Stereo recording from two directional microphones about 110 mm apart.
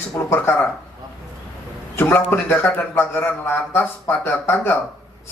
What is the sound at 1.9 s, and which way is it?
Speech, 20° left (ahead or behind).